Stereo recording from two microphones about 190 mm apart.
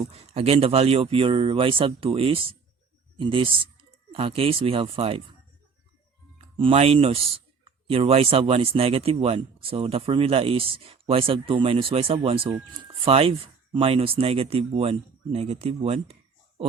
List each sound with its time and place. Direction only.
0.1 s speech: 30° right (ahead or behind)
6.6 s speech: 30° right (ahead or behind)